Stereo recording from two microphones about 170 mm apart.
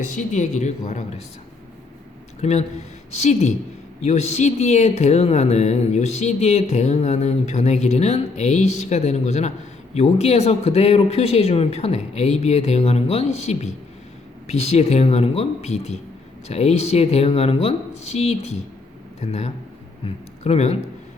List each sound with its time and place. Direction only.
0.0 s speech: 45° left (ahead or behind)
2.4 s speech: 40° left (ahead or behind)